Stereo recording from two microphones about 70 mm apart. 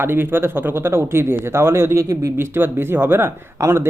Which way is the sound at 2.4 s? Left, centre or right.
Right.